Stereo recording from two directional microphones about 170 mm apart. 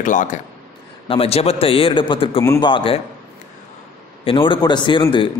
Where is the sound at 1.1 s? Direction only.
35° left (ahead or behind).